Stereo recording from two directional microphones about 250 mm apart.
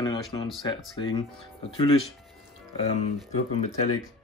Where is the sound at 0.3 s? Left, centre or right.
Centre.